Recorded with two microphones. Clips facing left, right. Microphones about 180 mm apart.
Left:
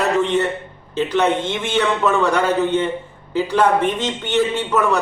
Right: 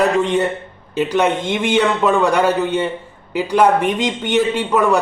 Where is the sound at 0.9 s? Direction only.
10° right (ahead or behind).